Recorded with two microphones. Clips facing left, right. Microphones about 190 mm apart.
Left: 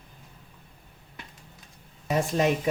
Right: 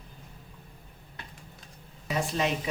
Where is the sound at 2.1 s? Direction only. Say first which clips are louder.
Left 5 dB; 50° left (ahead or behind).